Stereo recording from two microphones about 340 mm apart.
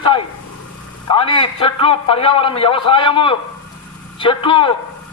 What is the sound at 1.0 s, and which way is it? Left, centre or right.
A man's voice, centre.